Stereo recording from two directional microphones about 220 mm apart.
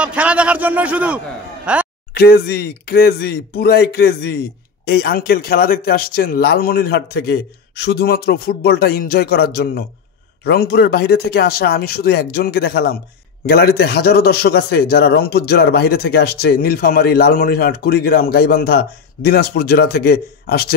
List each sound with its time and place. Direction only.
0.0 s a man's voice: 5° right (ahead or behind)
2.1 s a man's voice: 45° left (ahead or behind)